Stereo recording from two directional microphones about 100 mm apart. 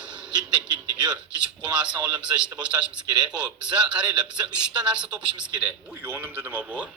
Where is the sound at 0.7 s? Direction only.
45° right (ahead or behind).